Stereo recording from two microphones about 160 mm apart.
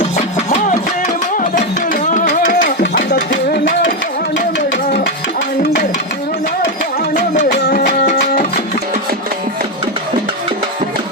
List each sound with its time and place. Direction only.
1.4 s music: 55° left (ahead or behind); by 3.6 s 90° left
7.2 s music: 60° left (ahead or behind)